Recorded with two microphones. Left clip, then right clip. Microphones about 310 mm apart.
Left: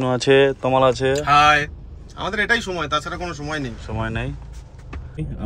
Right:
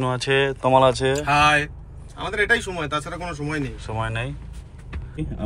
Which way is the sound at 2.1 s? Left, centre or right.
Left.